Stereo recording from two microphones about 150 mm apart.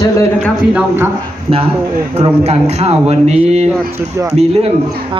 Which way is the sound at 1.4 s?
40° right (ahead or behind).